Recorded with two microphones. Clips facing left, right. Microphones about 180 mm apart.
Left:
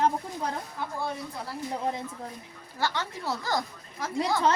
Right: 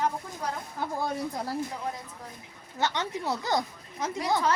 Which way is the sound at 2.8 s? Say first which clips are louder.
Right 1 dB; 20° right (ahead or behind).